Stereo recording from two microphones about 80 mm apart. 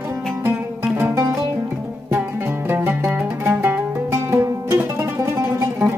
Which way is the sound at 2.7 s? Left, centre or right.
Right.